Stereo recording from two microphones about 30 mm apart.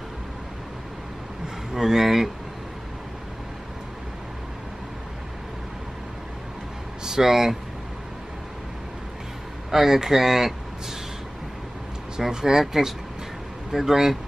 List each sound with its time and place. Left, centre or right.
1.7 s speech: centre
7.1 s speech: centre
9.7 s speech: centre
12.2 s speech: right